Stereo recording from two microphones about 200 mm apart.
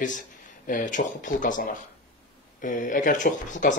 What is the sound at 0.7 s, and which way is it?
Speech, 40° left (ahead or behind).